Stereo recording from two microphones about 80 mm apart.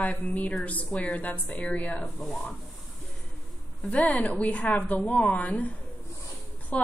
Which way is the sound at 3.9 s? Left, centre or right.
Centre.